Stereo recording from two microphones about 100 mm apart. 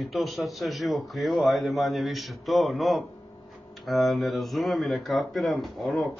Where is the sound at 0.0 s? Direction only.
Centre (ahead or behind).